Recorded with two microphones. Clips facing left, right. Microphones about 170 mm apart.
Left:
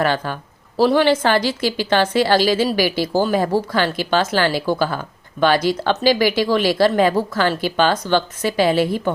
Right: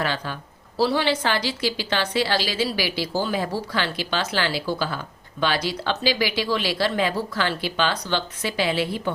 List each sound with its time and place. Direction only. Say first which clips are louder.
0.0 s a woman's voice: left 7 dB; 50° left (ahead or behind)